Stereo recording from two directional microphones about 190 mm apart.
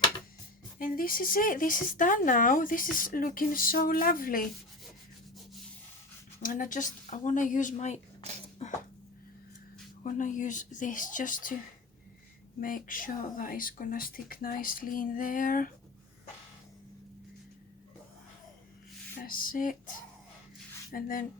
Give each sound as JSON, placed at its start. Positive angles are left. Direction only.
{"t": 0.8, "sound": "speech", "side_deg": 50}
{"t": 6.4, "sound": "speech", "side_deg": 45}
{"t": 8.6, "sound": "a sound", "side_deg": 35}
{"t": 10.0, "sound": "speech", "side_deg": 40}
{"t": 12.5, "sound": "speech", "side_deg": 45}
{"t": 19.2, "sound": "speech", "side_deg": 50}
{"t": 20.9, "sound": "speech", "side_deg": 50}